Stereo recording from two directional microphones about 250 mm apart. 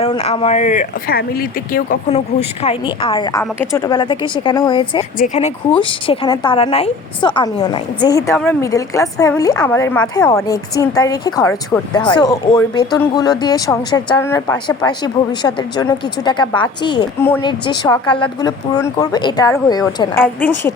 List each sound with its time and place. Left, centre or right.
0.0 s a woman's voice: left
2.6 s a woman's voice: left
5.1 s speech: left
5.8 s a woman's voice: centre